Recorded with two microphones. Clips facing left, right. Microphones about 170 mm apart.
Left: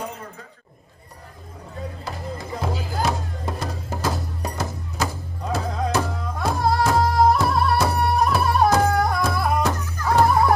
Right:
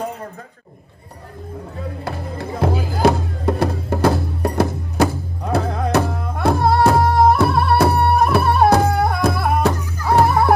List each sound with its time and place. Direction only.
2.0 s music: 60° right (ahead or behind)